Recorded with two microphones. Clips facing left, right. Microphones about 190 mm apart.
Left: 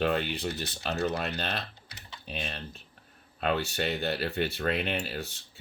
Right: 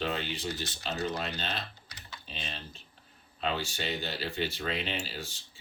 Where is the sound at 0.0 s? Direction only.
55° left (ahead or behind).